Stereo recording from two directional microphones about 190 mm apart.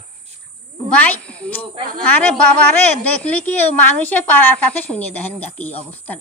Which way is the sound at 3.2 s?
5° left (ahead or behind).